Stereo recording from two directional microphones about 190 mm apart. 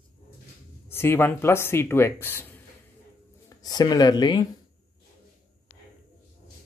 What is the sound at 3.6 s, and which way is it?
Speech, 20° left (ahead or behind).